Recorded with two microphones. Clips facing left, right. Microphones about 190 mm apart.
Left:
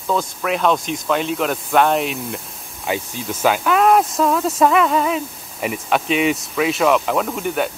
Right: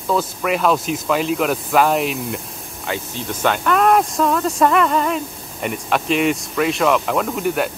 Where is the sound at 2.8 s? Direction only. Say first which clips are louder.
Left 2 dB; 15° left (ahead or behind).